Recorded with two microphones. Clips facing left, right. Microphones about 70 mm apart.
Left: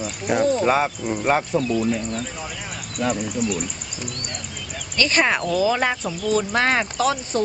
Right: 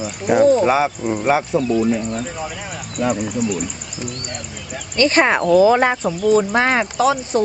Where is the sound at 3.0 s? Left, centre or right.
Centre.